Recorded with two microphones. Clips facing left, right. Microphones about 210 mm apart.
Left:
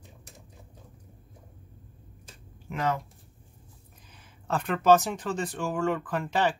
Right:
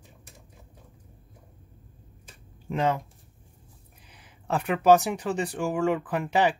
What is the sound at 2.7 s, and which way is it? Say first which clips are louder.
Speech: right 3 dB; 25° right (ahead or behind).